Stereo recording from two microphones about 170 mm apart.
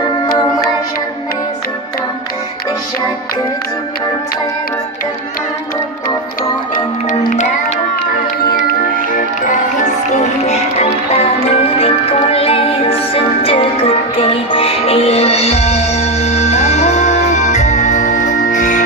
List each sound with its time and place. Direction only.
6.7 s music: 50° left (ahead or behind)
8.5 s music: 50° left (ahead or behind)